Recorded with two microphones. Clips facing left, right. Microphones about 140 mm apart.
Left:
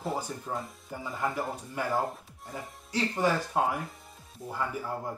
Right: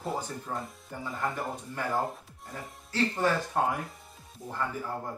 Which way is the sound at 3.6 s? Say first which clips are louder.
Even; centre (ahead or behind).